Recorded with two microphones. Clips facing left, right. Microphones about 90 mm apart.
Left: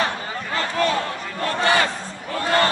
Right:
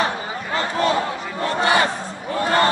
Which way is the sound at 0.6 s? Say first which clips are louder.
Right 2 dB; 25° right (ahead or behind).